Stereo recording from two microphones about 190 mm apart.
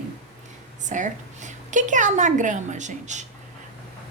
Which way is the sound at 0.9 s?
40° right (ahead or behind).